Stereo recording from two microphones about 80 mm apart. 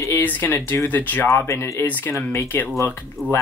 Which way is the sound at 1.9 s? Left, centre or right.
Left.